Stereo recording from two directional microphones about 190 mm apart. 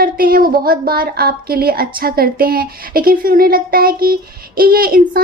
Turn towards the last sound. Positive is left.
turn(degrees=-50)  # may be behind; listen again after turning